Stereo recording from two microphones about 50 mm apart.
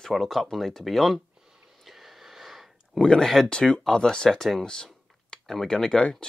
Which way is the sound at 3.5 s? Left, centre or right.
Centre.